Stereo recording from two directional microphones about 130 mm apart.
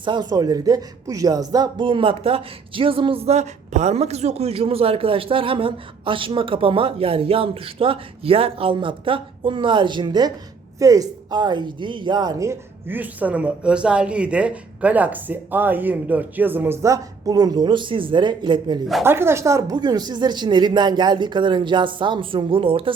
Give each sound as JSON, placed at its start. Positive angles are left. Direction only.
{"t": 0.0, "sound": "speech", "side_deg": -35}
{"t": 19.0, "sound": "a woman's voice", "side_deg": -20}